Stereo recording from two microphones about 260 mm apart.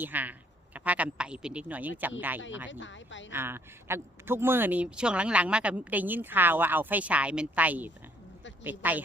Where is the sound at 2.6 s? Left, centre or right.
Left.